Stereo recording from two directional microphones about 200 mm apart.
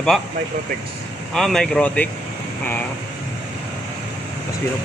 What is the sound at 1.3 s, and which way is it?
Speech, centre (ahead or behind).